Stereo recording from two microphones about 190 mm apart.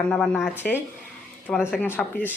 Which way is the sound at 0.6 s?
50° left (ahead or behind).